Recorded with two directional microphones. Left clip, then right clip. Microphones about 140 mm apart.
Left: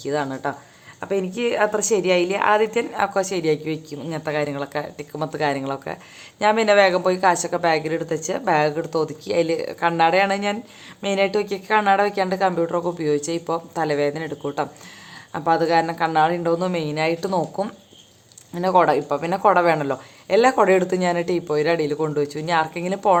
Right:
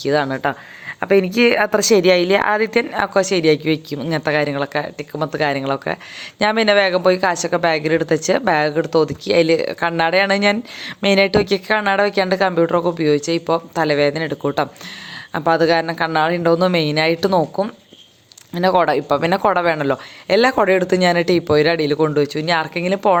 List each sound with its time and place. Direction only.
0.0 s a woman's voice: 35° right (ahead or behind)
6.4 s a woman's voice: 35° right (ahead or behind)
18.5 s a woman's voice: 30° right (ahead or behind)